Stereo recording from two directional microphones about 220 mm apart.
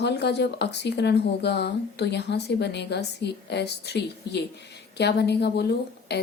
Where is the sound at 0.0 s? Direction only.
50° left (ahead or behind).